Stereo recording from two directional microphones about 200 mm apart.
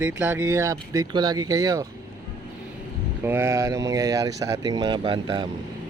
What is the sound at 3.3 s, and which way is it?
Speech, 10° right (ahead or behind).